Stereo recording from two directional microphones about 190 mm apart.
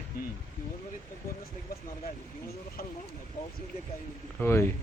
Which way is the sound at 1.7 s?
55° left (ahead or behind).